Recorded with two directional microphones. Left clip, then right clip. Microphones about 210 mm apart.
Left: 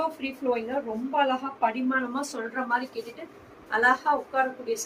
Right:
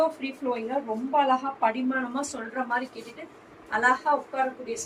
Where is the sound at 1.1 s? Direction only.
10° left (ahead or behind).